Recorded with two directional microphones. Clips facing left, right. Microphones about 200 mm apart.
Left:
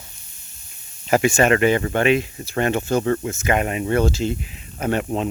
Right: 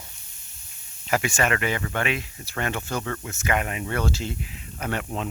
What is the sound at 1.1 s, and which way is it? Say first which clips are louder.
Speech: left 8 dB; 25° left (ahead or behind).